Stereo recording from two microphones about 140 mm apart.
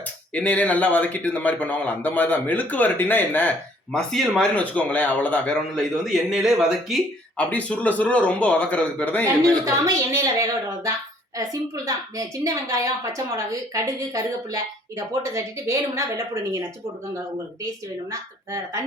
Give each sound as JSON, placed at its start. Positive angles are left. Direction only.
{"t": 0.0, "sound": "speech", "side_deg": 10}
{"t": 7.3, "sound": "speech", "side_deg": 10}
{"t": 9.6, "sound": "a woman's voice", "side_deg": -20}
{"t": 18.1, "sound": "a woman's voice", "side_deg": -25}